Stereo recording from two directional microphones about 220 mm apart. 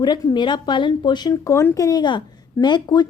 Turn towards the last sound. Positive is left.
turn(degrees=20)  # may be behind; listen again after turning